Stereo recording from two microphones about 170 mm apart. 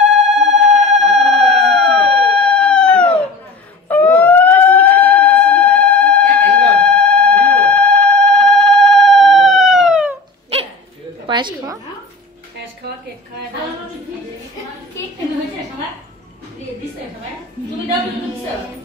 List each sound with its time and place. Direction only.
0.1 s telephone bell ringing: 40° right (ahead or behind)
0.9 s telephone bell ringing: centre (ahead or behind)
1.7 s a sound: 5° left (ahead or behind)
2.1 s cat: 5° left (ahead or behind)
3.9 s siren: 10° left (ahead or behind)
11.2 s a sound: 25° right (ahead or behind)